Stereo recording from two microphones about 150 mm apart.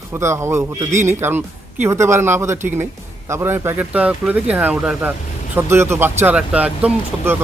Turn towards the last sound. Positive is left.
turn(degrees=-10)  # may be behind; listen again after turning